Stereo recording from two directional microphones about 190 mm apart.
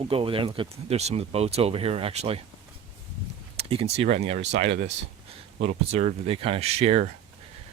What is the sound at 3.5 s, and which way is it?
Speech, 30° right (ahead or behind).